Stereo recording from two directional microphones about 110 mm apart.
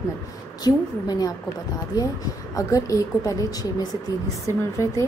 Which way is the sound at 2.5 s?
30° left (ahead or behind).